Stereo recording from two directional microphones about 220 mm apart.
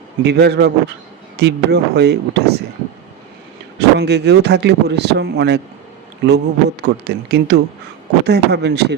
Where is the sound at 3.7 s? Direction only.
50° right (ahead or behind).